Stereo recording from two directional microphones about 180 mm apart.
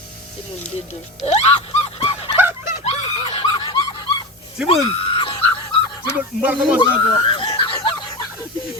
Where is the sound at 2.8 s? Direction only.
35° left (ahead or behind).